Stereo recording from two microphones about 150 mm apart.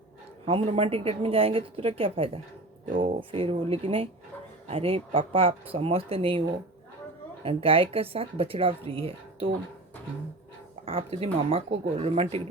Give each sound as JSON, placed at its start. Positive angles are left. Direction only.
{"t": 0.4, "sound": "speech", "side_deg": -40}
{"t": 7.4, "sound": "speech", "side_deg": -40}
{"t": 10.8, "sound": "speech", "side_deg": -40}